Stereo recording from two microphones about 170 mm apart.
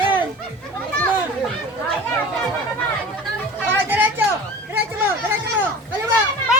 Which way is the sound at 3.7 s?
10° right (ahead or behind).